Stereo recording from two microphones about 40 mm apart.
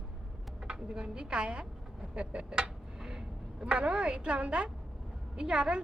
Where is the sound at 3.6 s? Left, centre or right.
Right.